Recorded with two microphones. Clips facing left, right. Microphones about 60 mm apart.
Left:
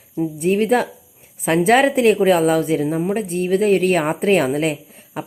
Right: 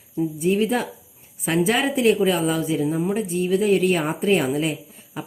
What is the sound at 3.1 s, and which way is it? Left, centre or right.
Speech, left.